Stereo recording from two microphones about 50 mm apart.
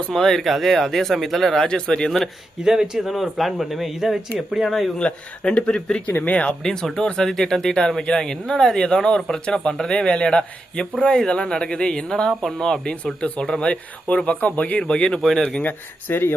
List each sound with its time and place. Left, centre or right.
0.1 s speech: centre
2.6 s speech: centre
4.9 s speech: left
6.6 s speech: centre
12.3 s speech: centre
12.5 s speech: centre
15.2 s speech: centre
15.6 s speech: left